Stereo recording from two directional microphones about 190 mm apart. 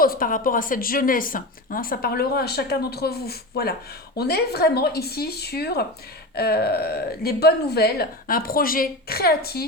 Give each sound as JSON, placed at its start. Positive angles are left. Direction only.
{"t": 0.0, "sound": "speech", "side_deg": 50}